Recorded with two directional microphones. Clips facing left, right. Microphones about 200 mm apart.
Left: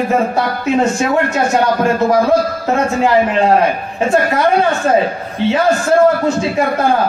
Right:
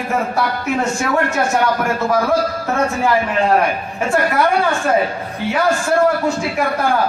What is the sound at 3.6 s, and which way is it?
A man's voice, 20° left (ahead or behind).